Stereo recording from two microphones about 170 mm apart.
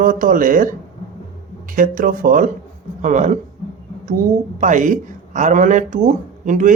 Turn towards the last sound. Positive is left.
turn(degrees=-50)  # may be behind; listen again after turning